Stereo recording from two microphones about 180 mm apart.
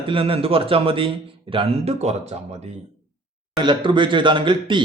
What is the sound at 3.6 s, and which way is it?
A man's voice, 25° right (ahead or behind).